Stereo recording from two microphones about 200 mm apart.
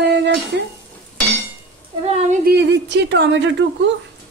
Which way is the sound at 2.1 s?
35° right (ahead or behind).